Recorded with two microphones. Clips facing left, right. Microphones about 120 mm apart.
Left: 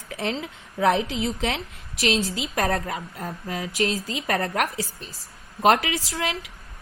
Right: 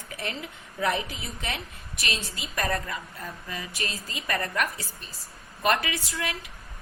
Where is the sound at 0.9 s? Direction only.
90° left.